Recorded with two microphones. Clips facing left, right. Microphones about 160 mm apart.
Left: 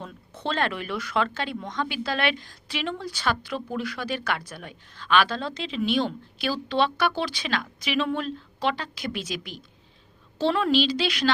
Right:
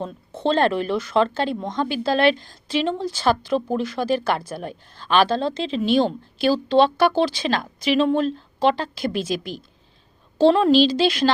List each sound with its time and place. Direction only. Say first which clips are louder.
0.0 s speech: right 9 dB; 30° right (ahead or behind)